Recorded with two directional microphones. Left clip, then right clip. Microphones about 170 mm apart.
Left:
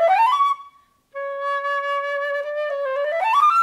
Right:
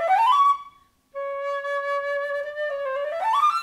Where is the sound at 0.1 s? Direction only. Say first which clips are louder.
Left 1 dB; 25° left (ahead or behind).